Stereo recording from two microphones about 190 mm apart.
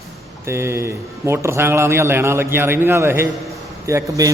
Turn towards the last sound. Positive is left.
turn(degrees=-15)  # may be behind; listen again after turning